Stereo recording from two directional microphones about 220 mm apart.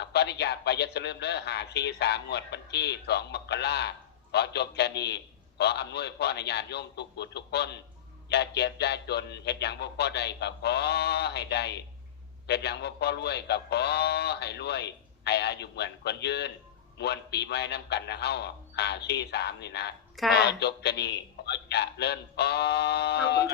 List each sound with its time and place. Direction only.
0.0 s a man's voice: 50° left (ahead or behind)